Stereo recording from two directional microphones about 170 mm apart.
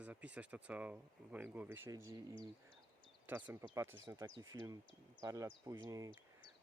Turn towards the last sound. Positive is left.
turn(degrees=-20)  # may be behind; listen again after turning